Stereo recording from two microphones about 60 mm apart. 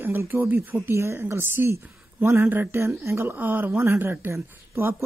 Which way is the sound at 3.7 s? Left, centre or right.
Right.